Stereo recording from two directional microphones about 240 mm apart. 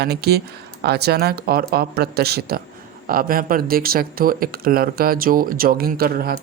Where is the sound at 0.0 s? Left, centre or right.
Right.